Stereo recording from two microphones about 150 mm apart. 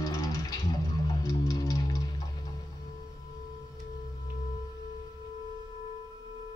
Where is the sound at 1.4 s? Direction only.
25° left (ahead or behind).